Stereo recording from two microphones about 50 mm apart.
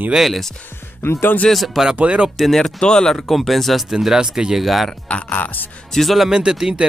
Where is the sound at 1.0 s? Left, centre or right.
Left.